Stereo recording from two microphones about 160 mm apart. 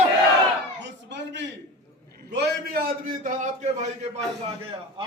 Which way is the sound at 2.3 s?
80° right.